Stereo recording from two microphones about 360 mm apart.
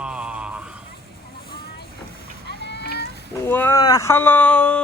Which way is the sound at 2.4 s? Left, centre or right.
Left.